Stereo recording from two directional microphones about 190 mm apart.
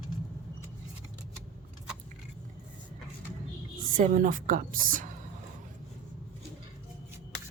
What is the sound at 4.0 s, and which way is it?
A woman's voice, 45° right (ahead or behind).